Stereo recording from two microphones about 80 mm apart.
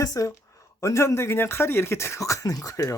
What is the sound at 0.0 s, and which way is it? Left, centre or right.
Speech, left.